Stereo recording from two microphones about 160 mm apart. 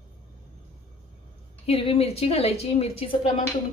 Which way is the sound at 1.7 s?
35° left (ahead or behind).